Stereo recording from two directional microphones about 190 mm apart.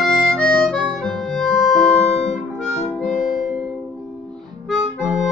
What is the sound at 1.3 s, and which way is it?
Music, centre (ahead or behind).